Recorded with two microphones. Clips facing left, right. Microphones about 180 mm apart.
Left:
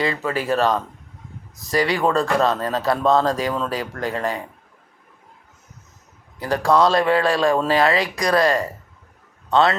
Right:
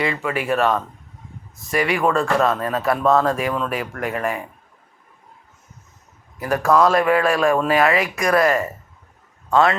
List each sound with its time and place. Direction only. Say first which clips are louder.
0.0 s speech: even; 35° left (ahead or behind)
6.4 s a man's voice: right 1 dB; 30° left (ahead or behind)